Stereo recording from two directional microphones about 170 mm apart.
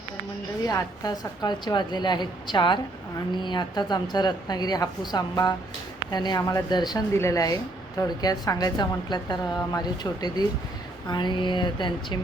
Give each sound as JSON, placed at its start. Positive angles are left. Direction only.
{"t": 0.7, "sound": "a woman's voice", "side_deg": 20}